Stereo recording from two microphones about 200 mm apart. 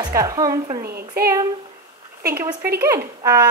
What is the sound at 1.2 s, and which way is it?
Speech, 50° right (ahead or behind).